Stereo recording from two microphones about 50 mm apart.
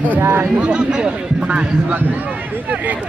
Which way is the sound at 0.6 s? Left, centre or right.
Centre.